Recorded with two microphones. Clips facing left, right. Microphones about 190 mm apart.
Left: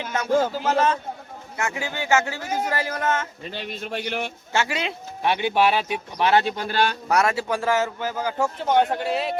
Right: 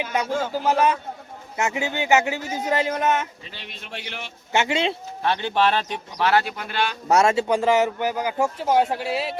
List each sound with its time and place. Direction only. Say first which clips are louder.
0.0 s speech: left 3 dB; 15° right (ahead or behind)
3.4 s a man's voice: left 9 dB; 45° left (ahead or behind)
4.5 s speech: right 4 dB; 25° right (ahead or behind)
5.2 s speech: left 1 dB; 15° left (ahead or behind); by 6.9 s 35° left (ahead or behind)
7.1 s speech: right 8 dB; 25° right (ahead or behind); by 9.3 s 5° right (ahead or behind)